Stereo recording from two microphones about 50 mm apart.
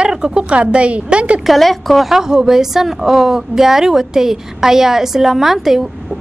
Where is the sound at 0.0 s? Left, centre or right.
Centre.